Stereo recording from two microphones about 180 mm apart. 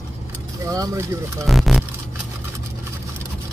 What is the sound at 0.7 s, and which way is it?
Speech, 15° right (ahead or behind).